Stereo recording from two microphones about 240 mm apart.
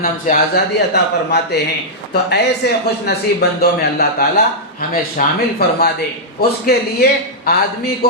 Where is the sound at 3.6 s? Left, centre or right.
Left.